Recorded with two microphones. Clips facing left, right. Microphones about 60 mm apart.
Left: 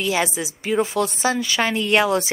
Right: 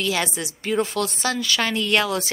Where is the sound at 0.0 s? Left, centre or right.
Centre.